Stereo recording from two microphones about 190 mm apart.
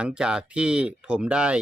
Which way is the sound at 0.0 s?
5° right (ahead or behind).